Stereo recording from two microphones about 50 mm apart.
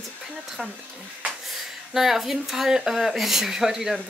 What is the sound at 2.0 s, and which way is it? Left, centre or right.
Speech, centre.